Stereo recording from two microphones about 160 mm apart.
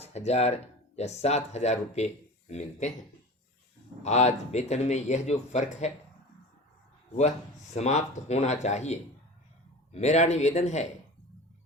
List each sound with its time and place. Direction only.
0.0 s speech: 40° left (ahead or behind)
4.0 s speech: 45° left (ahead or behind)
7.2 s speech: 45° left (ahead or behind)